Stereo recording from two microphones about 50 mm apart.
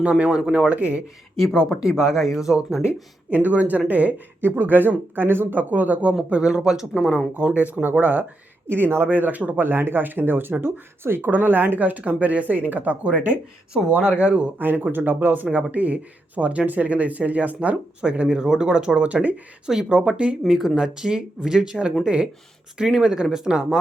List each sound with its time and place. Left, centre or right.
0.0 s speech: right
0.7 s speech: right
1.8 s speech: centre
3.2 s speech: right
4.4 s speech: right
6.3 s speech: centre
7.3 s speech: right
8.6 s speech: right
13.8 s speech: centre
14.9 s speech: right
19.6 s speech: centre
20.4 s speech: centre
20.7 s speech: centre
22.8 s speech: centre